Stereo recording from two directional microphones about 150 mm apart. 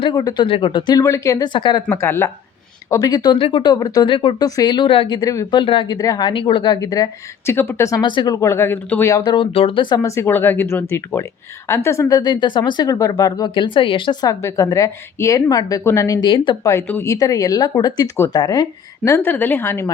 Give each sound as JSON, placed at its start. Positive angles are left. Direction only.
{"t": 0.0, "sound": "speech", "side_deg": 25}
{"t": 0.4, "sound": "speech", "side_deg": 35}
{"t": 1.5, "sound": "speech", "side_deg": 35}
{"t": 1.9, "sound": "speech", "side_deg": 15}
{"t": 16.6, "sound": "speech", "side_deg": 15}